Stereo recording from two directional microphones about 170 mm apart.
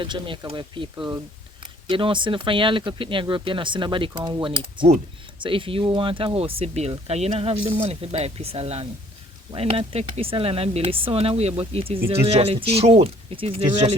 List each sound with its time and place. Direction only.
0.0 s speech: 30° right (ahead or behind)